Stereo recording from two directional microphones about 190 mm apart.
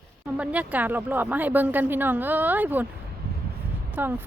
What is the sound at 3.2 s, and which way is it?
Vehicle, 55° right (ahead or behind).